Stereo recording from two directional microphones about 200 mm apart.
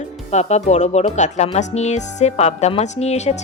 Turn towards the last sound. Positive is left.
turn(degrees=35)  # may be behind; listen again after turning